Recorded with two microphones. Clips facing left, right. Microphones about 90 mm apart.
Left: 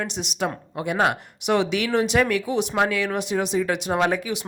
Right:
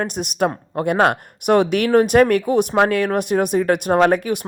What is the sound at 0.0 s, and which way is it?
Speech, 50° right (ahead or behind).